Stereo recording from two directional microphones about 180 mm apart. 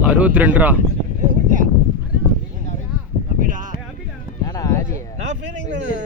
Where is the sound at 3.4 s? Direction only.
45° right (ahead or behind).